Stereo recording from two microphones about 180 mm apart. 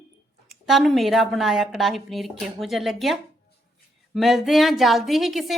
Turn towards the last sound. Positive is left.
turn(degrees=0)  # may be behind; listen again after turning